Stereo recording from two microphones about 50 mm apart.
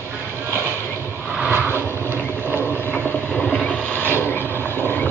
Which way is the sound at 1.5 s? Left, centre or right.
Right.